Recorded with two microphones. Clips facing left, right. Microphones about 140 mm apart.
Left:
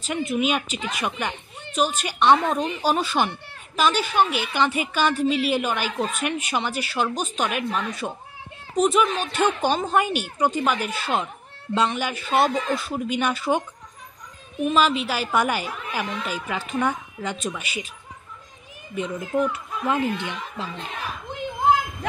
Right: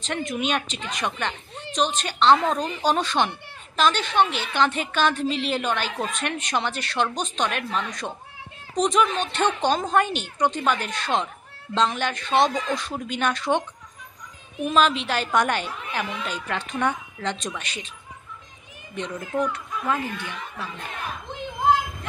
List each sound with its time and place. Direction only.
0.0 s a woman's voice: 10° left (ahead or behind)
18.9 s a woman's voice: 5° left (ahead or behind)
19.9 s speech: 20° left (ahead or behind)